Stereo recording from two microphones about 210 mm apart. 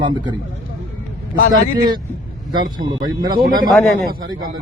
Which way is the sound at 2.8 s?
20° right (ahead or behind).